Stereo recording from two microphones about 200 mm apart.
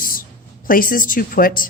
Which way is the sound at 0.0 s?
45° left (ahead or behind).